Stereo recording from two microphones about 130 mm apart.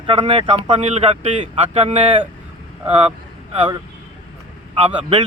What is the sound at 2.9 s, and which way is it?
Vehicle, 50° right (ahead or behind).